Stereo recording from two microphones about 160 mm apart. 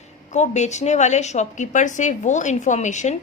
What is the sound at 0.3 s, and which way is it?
A woman's voice, 45° left (ahead or behind).